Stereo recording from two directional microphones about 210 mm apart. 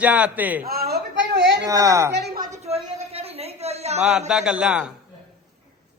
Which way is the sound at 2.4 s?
30° right (ahead or behind).